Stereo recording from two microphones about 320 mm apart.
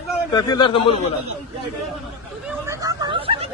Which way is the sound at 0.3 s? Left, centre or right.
Centre.